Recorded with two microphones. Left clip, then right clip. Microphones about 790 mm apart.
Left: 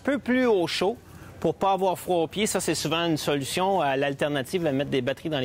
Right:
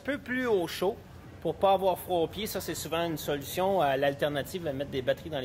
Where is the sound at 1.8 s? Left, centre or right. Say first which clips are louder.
Left 3 dB; left.